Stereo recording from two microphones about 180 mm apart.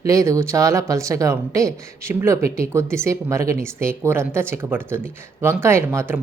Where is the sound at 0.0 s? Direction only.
15° right (ahead or behind).